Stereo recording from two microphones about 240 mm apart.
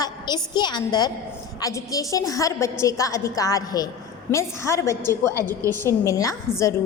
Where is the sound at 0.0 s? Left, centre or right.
Centre.